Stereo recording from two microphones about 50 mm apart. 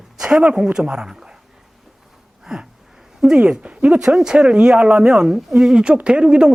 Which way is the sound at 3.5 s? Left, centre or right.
Right.